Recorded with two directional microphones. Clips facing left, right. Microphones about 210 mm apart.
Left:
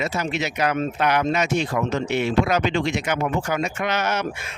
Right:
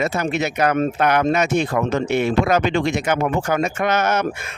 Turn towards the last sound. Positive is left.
turn(degrees=-50)  # may be behind; listen again after turning